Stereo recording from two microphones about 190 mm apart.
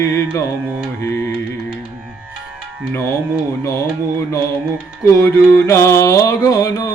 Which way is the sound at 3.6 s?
15° left (ahead or behind).